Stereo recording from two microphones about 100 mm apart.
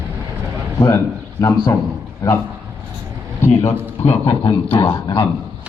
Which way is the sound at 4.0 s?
90° left.